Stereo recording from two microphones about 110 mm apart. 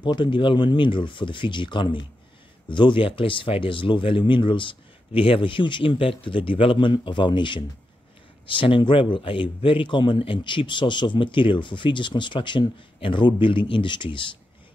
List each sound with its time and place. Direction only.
0.0 s speech: 45° left (ahead or behind)